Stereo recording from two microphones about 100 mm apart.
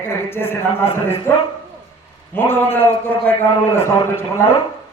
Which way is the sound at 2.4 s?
20° left (ahead or behind).